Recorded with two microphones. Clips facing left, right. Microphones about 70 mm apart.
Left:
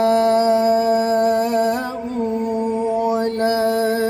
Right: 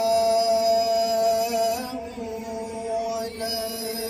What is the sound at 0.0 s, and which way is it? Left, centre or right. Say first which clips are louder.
Music: left 5 dB; left.